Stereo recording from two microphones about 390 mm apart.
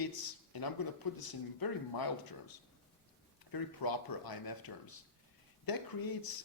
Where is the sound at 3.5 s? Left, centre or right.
Left.